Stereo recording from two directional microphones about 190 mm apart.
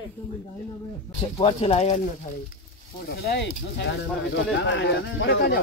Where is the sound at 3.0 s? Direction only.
55° left (ahead or behind).